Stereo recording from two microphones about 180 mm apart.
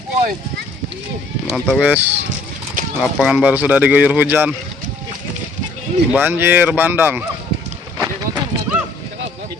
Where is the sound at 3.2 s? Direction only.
5° right (ahead or behind).